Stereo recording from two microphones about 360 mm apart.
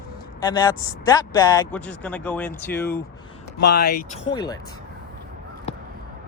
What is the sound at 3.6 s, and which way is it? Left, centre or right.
Speech, left.